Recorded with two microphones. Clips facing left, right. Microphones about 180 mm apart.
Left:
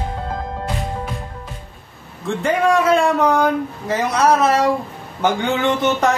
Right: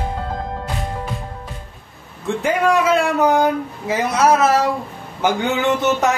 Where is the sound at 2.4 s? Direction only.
5° right (ahead or behind).